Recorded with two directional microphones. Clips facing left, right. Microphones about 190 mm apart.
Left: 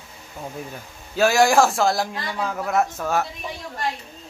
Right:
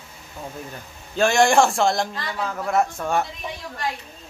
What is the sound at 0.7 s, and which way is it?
A man's voice, 5° left (ahead or behind).